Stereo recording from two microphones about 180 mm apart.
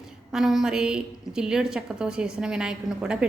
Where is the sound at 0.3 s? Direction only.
Centre (ahead or behind).